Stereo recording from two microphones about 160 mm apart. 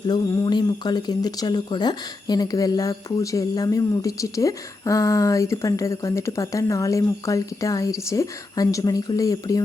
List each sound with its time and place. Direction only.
0.1 s speech: 25° left (ahead or behind)